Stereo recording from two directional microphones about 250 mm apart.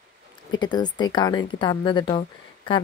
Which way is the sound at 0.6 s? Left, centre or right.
Centre.